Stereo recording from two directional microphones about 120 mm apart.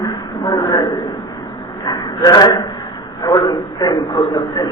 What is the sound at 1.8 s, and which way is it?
Speech, 35° left (ahead or behind).